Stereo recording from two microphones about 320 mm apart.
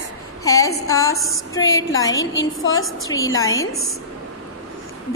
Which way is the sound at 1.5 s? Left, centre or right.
Centre.